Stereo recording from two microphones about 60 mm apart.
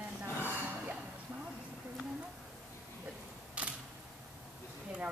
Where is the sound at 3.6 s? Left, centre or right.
Right.